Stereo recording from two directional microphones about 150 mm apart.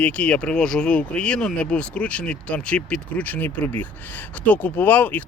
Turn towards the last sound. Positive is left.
turn(degrees=10)  # may be behind; listen again after turning